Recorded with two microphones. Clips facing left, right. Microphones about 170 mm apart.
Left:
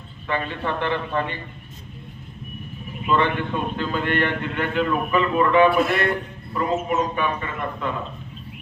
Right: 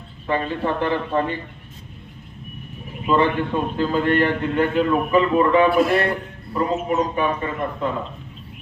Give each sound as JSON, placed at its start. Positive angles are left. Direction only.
{"t": 0.3, "sound": "a man's voice", "side_deg": -35}
{"t": 3.1, "sound": "a man's voice", "side_deg": -35}